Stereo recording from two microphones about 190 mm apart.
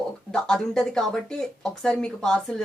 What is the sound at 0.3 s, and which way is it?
Speech, 5° left (ahead or behind).